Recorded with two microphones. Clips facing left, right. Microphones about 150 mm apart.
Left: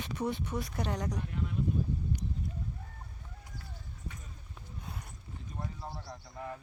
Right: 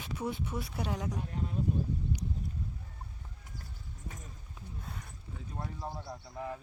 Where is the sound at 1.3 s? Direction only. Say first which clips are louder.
Left 1 dB; 35° right (ahead or behind).